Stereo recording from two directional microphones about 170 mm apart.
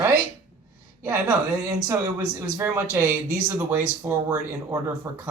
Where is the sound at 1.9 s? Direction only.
15° right (ahead or behind).